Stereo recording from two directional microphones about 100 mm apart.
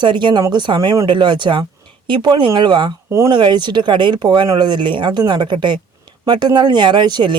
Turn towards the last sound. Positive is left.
turn(degrees=-45)  # may be behind; listen again after turning